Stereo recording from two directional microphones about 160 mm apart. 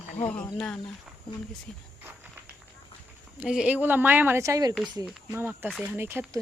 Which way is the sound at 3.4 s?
5° right (ahead or behind).